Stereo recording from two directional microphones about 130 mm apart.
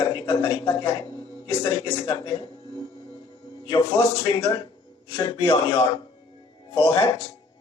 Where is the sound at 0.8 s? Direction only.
35° left (ahead or behind).